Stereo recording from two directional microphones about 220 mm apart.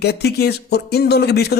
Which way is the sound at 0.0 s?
50° left (ahead or behind).